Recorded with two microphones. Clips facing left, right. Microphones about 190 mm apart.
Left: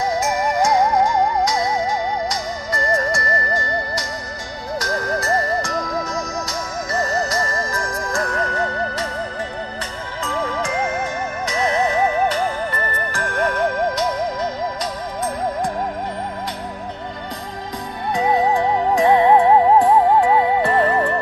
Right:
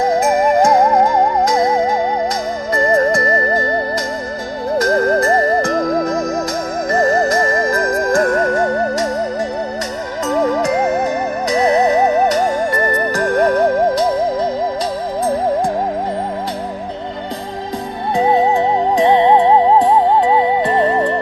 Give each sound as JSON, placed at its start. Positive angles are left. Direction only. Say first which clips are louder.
{"t": 0.0, "sound": "theremin", "louder": "right 7 dB", "side_deg": -55}
{"t": 2.7, "sound": "music", "louder": "right 8 dB", "side_deg": -55}
{"t": 8.0, "sound": "theremin", "louder": "right 9 dB", "side_deg": -45}
{"t": 10.2, "sound": "music", "louder": "right 9 dB", "side_deg": -40}
{"t": 18.1, "sound": "music", "louder": "right 4 dB", "side_deg": -30}